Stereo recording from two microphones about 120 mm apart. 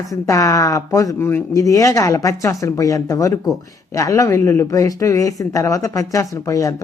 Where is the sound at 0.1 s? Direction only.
25° left (ahead or behind).